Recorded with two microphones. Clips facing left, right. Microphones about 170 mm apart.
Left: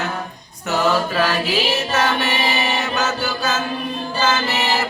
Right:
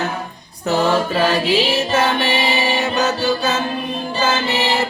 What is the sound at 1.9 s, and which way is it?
Music, 30° right (ahead or behind).